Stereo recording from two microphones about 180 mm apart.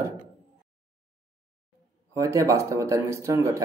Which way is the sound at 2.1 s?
15° right (ahead or behind).